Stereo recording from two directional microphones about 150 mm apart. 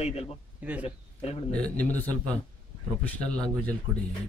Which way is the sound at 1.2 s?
40° left (ahead or behind).